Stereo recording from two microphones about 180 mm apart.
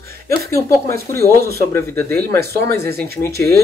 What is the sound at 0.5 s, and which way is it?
Speech, 15° left (ahead or behind).